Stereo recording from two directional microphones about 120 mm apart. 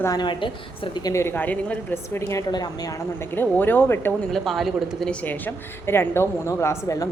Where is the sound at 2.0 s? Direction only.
25° left (ahead or behind).